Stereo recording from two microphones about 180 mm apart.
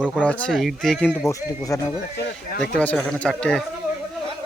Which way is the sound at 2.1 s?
65° left (ahead or behind).